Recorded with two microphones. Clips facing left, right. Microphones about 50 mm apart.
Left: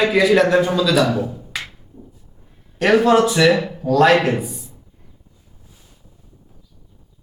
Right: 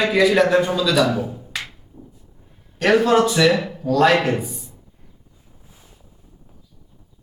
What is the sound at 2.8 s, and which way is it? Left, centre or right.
A man's voice, centre.